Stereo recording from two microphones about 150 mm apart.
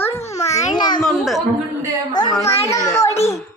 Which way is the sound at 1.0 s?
Centre (ahead or behind).